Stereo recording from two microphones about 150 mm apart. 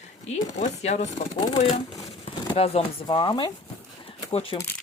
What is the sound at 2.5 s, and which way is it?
Speech, 40° left (ahead or behind).